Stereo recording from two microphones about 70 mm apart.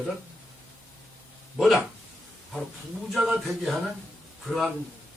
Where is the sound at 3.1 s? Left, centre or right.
Centre.